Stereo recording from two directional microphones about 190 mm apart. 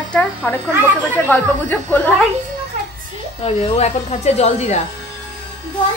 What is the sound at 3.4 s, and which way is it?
A woman's voice, 35° left (ahead or behind).